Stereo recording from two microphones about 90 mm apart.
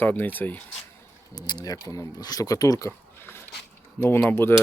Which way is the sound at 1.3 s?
50° left (ahead or behind).